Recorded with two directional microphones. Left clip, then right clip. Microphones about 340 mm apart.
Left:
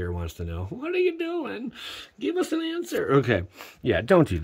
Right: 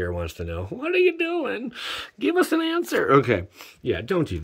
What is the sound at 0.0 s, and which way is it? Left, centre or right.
Speech, centre.